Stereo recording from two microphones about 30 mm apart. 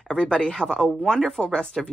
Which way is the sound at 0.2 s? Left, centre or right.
Left.